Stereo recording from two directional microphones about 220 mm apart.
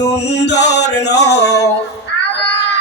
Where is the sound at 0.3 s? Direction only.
50° left (ahead or behind).